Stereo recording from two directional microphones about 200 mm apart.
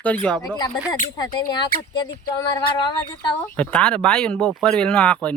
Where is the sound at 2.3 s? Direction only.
20° left (ahead or behind).